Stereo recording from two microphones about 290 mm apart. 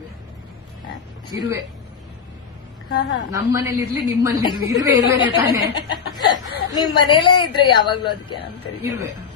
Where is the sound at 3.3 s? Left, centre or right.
Centre.